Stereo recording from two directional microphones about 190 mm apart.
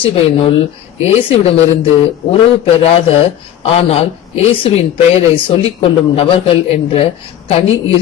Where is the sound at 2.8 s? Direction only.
30° left (ahead or behind).